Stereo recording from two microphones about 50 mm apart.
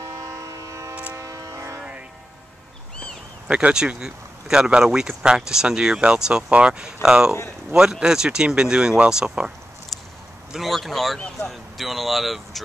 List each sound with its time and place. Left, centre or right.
0.0 s train: right
1.8 s train: right
3.4 s speech: right
10.5 s a sound: centre
11.4 s speech: centre